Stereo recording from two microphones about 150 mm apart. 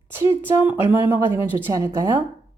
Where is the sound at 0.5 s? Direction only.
15° right (ahead or behind).